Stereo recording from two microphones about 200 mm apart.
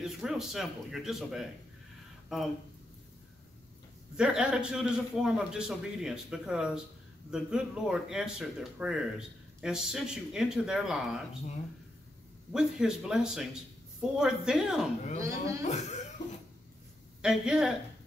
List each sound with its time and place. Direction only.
0.0 s speech: centre (ahead or behind)
4.2 s a man's voice: 5° right (ahead or behind)
12.5 s a man's voice: 5° right (ahead or behind)
15.1 s speech: 15° right (ahead or behind)
15.6 s speech: 35° left (ahead or behind)
17.2 s a man's voice: 5° right (ahead or behind)